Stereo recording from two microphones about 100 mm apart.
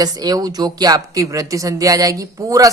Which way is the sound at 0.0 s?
40° right (ahead or behind).